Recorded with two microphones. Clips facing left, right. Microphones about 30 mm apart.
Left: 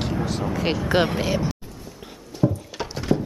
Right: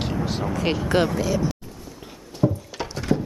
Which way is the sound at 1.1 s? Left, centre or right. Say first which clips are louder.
Even; left.